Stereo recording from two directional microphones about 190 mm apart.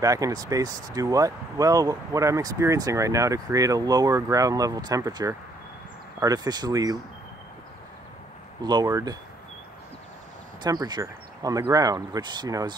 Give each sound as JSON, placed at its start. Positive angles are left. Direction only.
{"t": 0.0, "sound": "speech", "side_deg": -20}
{"t": 8.6, "sound": "speech", "side_deg": -20}
{"t": 10.6, "sound": "speech", "side_deg": -20}